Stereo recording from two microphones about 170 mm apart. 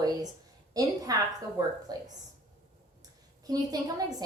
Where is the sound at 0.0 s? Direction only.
20° right (ahead or behind).